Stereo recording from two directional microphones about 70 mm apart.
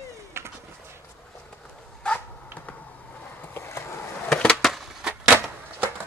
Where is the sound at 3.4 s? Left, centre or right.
Left.